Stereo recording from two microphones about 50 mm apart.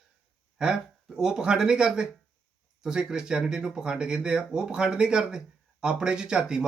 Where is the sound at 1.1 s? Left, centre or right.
Centre.